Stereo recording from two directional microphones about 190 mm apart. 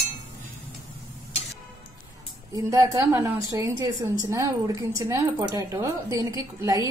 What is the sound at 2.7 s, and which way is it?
A woman's voice, 15° right (ahead or behind).